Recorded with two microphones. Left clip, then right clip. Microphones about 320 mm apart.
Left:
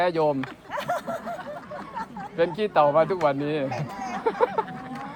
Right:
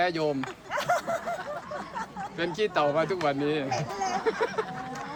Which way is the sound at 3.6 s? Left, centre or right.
Right.